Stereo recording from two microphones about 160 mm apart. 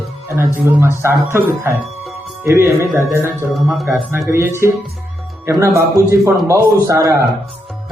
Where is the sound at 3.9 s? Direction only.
15° right (ahead or behind).